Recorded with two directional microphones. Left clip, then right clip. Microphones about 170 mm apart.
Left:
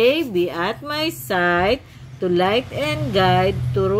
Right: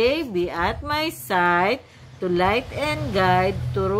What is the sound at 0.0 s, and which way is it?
Speech, 25° right (ahead or behind).